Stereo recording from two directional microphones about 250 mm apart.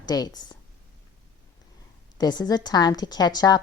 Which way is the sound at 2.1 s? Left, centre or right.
Centre.